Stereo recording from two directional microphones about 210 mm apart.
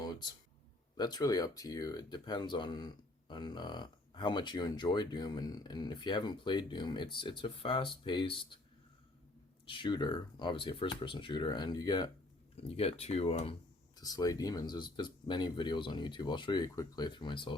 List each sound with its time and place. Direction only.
0.0 s a sound: 20° left (ahead or behind)
0.9 s speech: 20° left (ahead or behind)
9.6 s speech: 25° left (ahead or behind)